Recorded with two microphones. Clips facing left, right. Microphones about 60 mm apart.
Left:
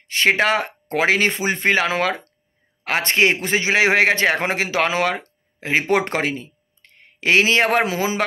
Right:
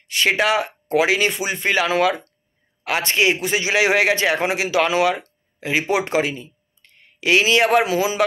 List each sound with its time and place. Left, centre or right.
0.1 s a man's voice: left